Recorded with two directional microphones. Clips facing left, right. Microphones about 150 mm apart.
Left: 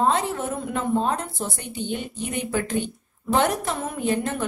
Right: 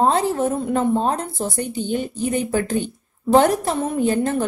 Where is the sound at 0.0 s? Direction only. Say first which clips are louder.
Right 5 dB; 35° right (ahead or behind).